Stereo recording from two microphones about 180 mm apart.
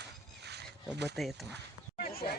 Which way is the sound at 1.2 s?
Centre (ahead or behind).